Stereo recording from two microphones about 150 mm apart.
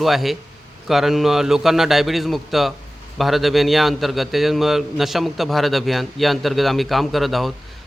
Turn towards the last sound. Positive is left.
turn(degrees=0)  # may be behind; listen again after turning